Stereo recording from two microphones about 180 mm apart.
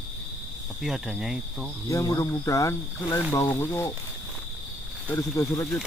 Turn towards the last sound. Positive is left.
turn(degrees=15)  # may be behind; listen again after turning